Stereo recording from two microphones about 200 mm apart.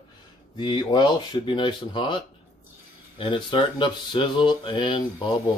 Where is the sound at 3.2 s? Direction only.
25° left (ahead or behind).